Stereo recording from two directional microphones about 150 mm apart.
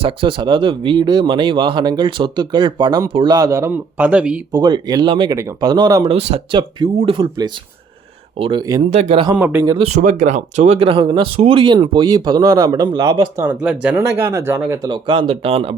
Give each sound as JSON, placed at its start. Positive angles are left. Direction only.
{"t": 0.0, "sound": "speech", "side_deg": -35}
{"t": 4.5, "sound": "speech", "side_deg": -25}
{"t": 9.3, "sound": "speech", "side_deg": -10}
{"t": 9.8, "sound": "speech", "side_deg": -55}
{"t": 13.4, "sound": "speech", "side_deg": -10}
{"t": 14.8, "sound": "speech", "side_deg": -35}